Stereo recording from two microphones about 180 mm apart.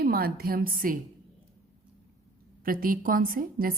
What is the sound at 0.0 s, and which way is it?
Speech, 55° right (ahead or behind).